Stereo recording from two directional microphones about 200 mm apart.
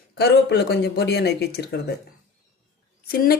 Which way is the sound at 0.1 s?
55° left (ahead or behind).